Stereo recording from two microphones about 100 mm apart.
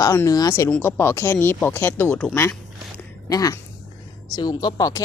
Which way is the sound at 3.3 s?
35° left (ahead or behind).